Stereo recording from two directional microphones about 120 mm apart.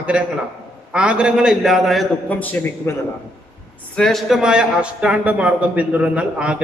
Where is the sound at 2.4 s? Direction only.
15° left (ahead or behind).